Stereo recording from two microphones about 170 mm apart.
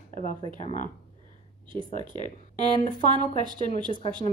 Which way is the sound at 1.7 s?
30° right (ahead or behind).